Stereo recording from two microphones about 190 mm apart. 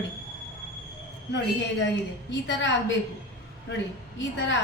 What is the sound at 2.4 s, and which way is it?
Speech, 70° left (ahead or behind).